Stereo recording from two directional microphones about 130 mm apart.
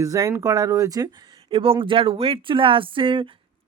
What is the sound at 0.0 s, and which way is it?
Speech, 25° right (ahead or behind).